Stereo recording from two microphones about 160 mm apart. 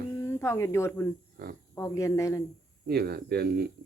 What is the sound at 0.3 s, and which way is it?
Speech, 15° left (ahead or behind).